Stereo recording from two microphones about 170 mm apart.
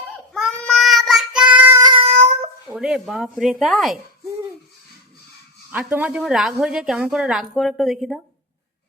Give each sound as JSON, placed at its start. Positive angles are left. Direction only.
{"t": 0.3, "sound": "child singing", "side_deg": 0}
{"t": 2.0, "sound": "a sound", "side_deg": -40}
{"t": 2.7, "sound": "a woman's voice", "side_deg": -5}
{"t": 5.7, "sound": "a woman's voice", "side_deg": -10}